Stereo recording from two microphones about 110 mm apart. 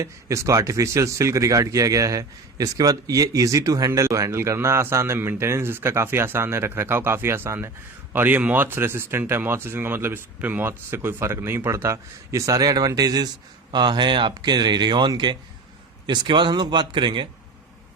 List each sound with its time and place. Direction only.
0.0 s speech: 30° right (ahead or behind); by 17.2 s 45° right (ahead or behind)